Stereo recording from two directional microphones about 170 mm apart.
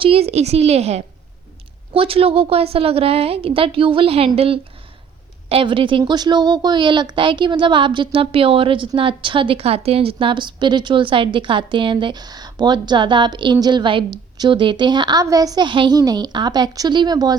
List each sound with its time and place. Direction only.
0.0 s a woman's voice: 35° right (ahead or behind)